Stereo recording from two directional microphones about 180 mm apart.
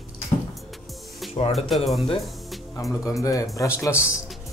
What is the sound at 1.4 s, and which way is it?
Speech, 35° left (ahead or behind).